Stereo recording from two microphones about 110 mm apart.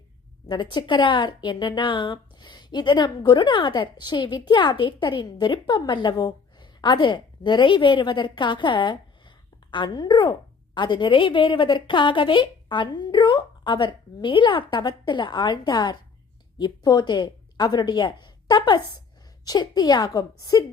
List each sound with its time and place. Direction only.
0.4 s a woman's voice: 45° left (ahead or behind)